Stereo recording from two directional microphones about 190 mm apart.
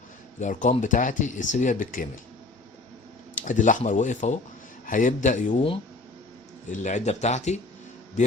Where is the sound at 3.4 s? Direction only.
40° left (ahead or behind).